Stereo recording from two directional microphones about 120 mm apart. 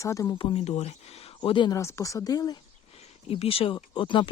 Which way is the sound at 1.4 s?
40° left (ahead or behind).